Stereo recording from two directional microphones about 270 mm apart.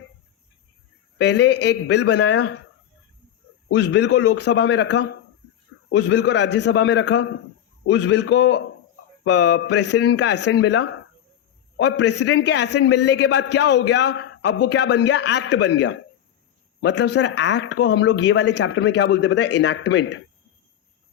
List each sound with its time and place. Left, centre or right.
1.2 s a man's voice: left
3.9 s a man's voice: left